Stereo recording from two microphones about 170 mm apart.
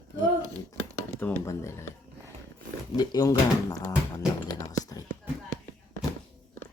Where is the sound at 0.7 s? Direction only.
10° left (ahead or behind).